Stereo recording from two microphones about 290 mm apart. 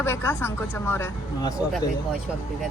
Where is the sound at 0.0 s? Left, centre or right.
Centre.